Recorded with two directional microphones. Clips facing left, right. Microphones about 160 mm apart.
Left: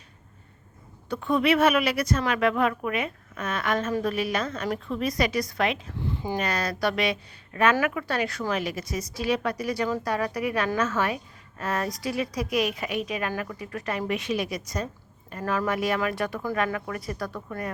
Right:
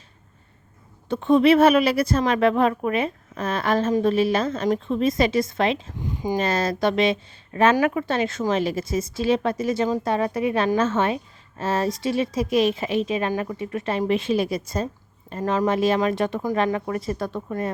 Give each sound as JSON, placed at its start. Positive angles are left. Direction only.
{"t": 1.0, "sound": "a woman's voice", "side_deg": -25}
{"t": 6.0, "sound": "a sound", "side_deg": -15}
{"t": 6.3, "sound": "a woman's voice", "side_deg": -25}